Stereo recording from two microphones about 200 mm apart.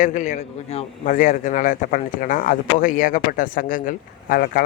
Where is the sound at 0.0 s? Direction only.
40° left (ahead or behind).